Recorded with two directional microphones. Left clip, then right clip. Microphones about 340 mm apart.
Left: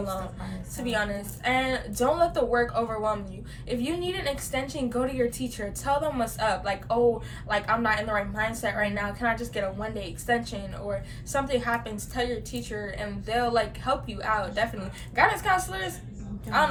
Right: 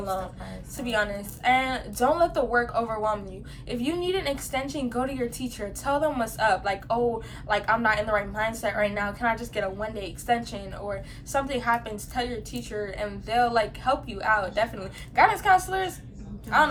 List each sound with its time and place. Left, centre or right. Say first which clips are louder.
0.8 s a woman's voice: right 2 dB; centre